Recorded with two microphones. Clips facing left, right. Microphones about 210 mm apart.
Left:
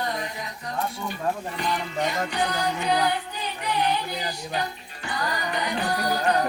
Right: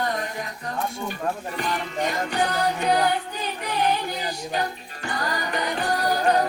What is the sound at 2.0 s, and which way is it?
Music, 50° right (ahead or behind).